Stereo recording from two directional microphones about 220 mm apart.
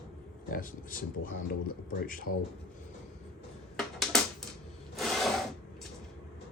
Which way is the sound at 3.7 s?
Centre (ahead or behind).